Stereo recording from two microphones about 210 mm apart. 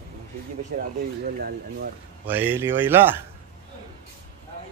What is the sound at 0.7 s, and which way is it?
Speech, 40° right (ahead or behind).